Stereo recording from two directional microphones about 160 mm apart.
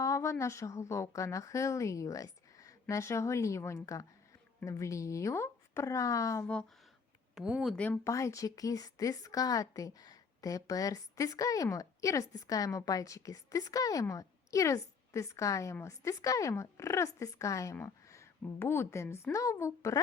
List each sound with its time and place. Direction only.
0.0 s a woman's voice: 20° left (ahead or behind)
7.3 s speech: 5° right (ahead or behind)
7.9 s a woman's voice: 20° left (ahead or behind)